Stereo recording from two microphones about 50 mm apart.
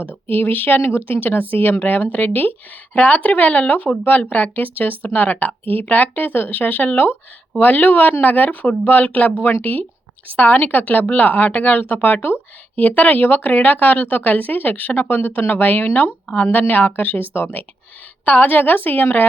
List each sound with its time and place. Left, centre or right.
0.3 s speech: left
2.9 s speech: left
15.9 s speech: left
16.5 s speech: left